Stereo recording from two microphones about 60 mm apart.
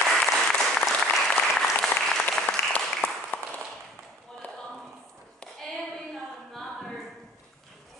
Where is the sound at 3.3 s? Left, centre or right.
Left.